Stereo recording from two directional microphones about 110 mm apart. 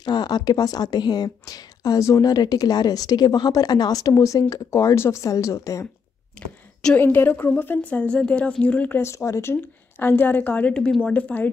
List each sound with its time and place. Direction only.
0.0 s a woman's voice: 40° left (ahead or behind)
6.4 s a woman's voice: 10° left (ahead or behind)
9.0 s a woman's voice: 25° left (ahead or behind)